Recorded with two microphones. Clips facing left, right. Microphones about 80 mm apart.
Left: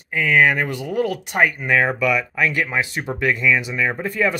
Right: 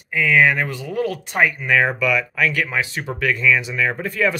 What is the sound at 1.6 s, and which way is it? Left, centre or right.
Speech, centre.